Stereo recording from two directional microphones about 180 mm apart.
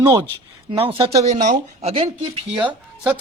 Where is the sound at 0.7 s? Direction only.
30° right (ahead or behind).